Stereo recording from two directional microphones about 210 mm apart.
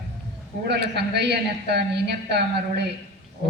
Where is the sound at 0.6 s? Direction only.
50° right (ahead or behind).